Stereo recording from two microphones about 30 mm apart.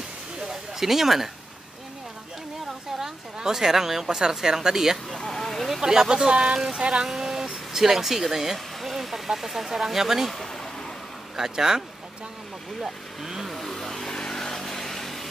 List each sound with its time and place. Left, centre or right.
0.4 s a sound: centre
3.0 s a woman's voice: centre
5.1 s a sound: centre
5.8 s speech: centre
7.1 s a sound: centre
9.7 s speech: centre
10.3 s speech: centre
11.3 s speech: centre
12.8 s speech: centre
13.5 s vehicle: centre
14.1 s vehicle: left
14.5 s vehicle: centre